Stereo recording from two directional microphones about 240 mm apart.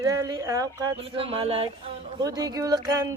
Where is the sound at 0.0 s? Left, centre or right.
Centre.